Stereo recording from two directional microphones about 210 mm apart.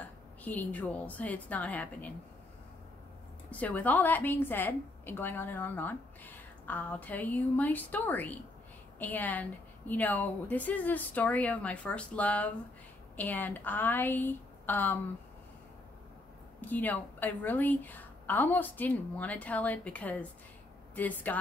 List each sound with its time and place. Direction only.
0.0 s a woman's voice: 10° left (ahead or behind)
3.4 s a woman's voice: 5° left (ahead or behind)
16.6 s a woman's voice: 10° left (ahead or behind)